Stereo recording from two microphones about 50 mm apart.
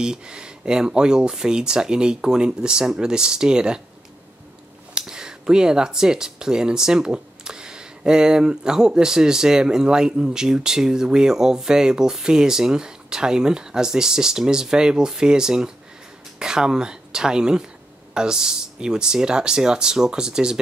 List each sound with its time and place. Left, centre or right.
0.0 s speech: centre
4.9 s speech: centre